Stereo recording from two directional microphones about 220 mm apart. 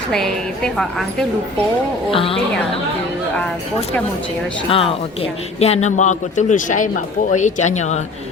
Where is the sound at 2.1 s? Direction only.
25° left (ahead or behind).